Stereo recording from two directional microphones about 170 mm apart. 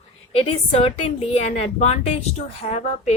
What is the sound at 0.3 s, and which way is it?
A woman's voice, 30° left (ahead or behind).